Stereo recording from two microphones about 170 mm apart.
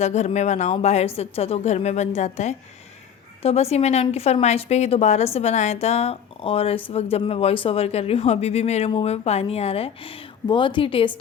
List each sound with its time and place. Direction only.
0.0 s a woman's voice: 40° left (ahead or behind)